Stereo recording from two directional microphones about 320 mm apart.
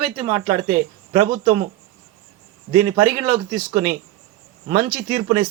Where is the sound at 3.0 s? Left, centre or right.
Centre.